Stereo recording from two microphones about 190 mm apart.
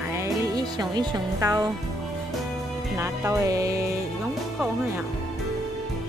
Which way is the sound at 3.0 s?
15° right (ahead or behind).